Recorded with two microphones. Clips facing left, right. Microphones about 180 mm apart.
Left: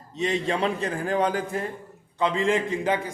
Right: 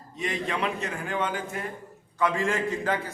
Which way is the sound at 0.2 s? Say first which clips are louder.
Left 5 dB; 25° left (ahead or behind).